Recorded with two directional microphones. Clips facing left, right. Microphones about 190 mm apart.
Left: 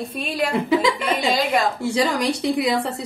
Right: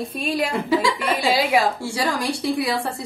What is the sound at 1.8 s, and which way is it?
Speech, 20° left (ahead or behind).